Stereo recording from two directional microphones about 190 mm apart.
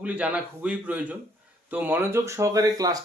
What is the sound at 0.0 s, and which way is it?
Speech, 5° right (ahead or behind).